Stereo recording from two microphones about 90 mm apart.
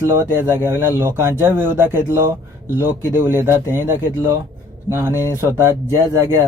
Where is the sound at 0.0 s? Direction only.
30° right (ahead or behind).